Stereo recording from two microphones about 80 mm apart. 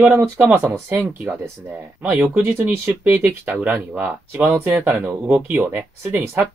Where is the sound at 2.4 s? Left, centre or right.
Right.